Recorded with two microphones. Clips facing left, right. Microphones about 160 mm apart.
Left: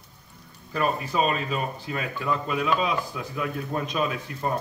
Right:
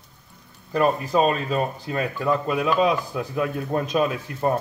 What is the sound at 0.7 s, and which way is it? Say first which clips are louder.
Speech: right 6 dB; 40° right (ahead or behind).